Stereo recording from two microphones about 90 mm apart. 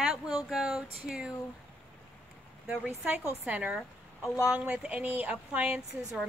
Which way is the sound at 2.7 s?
15° right (ahead or behind).